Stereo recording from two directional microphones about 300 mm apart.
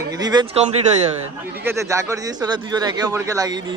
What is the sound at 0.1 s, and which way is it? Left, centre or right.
Speech, centre.